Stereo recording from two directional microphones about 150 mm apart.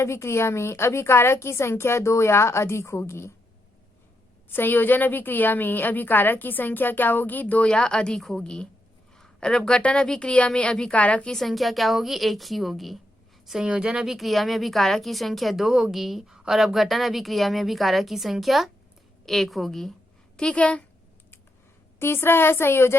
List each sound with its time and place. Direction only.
0.0 s a woman's voice: 20° left (ahead or behind)
4.4 s a woman's voice: 15° left (ahead or behind)
21.9 s a woman's voice: 15° left (ahead or behind)